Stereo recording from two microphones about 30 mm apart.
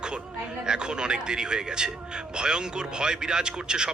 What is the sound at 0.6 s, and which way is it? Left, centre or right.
Speech, right.